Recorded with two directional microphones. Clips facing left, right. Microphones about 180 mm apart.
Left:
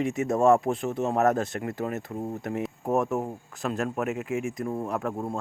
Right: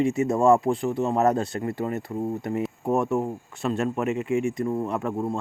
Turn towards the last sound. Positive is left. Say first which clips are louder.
# right 3 dB
turn(degrees=0)  # may be behind; listen again after turning